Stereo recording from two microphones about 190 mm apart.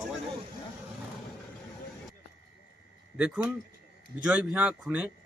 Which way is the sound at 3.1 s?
5° right (ahead or behind).